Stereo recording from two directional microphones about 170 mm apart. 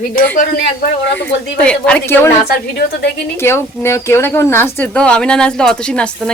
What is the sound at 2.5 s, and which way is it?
Speech, 65° left (ahead or behind).